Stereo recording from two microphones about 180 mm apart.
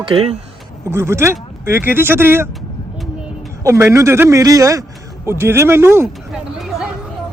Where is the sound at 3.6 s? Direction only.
15° right (ahead or behind).